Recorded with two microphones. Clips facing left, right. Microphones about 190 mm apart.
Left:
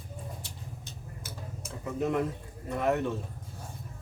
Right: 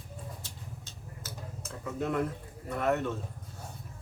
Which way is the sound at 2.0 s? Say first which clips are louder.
Left 2 dB; 15° left (ahead or behind).